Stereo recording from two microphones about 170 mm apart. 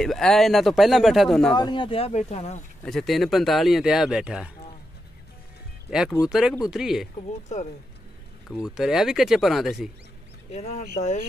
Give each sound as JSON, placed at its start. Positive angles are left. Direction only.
{"t": 0.0, "sound": "speech", "side_deg": 0}
{"t": 1.5, "sound": "speech", "side_deg": 25}
{"t": 2.8, "sound": "speech", "side_deg": 5}
{"t": 5.9, "sound": "speech", "side_deg": -5}
{"t": 8.5, "sound": "speech", "side_deg": -5}
{"t": 10.5, "sound": "speech", "side_deg": 40}